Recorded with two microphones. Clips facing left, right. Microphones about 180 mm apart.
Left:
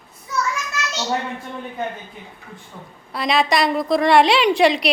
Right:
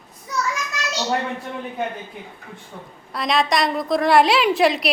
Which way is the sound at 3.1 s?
Centre (ahead or behind).